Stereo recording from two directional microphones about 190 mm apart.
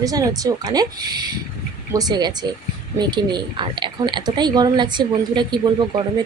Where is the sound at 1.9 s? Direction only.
20° right (ahead or behind).